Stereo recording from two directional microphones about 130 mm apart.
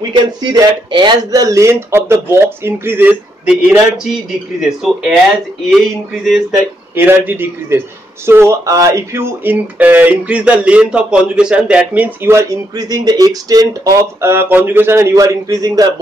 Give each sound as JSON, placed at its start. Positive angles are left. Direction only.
{"t": 0.1, "sound": "speech", "side_deg": -35}
{"t": 7.0, "sound": "speech", "side_deg": -15}
{"t": 14.2, "sound": "speech", "side_deg": -20}